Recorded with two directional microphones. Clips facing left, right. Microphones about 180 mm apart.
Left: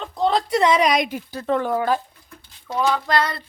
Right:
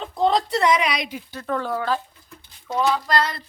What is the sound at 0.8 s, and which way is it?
Speech, 45° left (ahead or behind).